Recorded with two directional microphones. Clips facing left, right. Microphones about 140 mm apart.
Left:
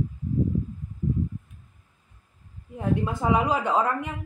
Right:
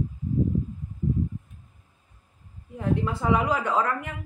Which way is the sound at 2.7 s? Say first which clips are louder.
Even; 20° left (ahead or behind).